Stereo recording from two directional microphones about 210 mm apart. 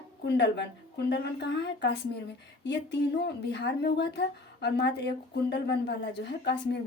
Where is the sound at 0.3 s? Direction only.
55° left (ahead or behind).